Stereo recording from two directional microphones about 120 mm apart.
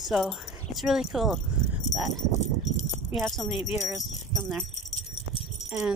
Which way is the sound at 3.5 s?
65° left (ahead or behind).